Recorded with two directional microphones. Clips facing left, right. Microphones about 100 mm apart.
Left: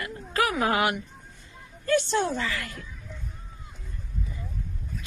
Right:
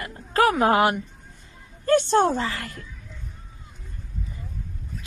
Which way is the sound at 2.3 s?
30° right (ahead or behind).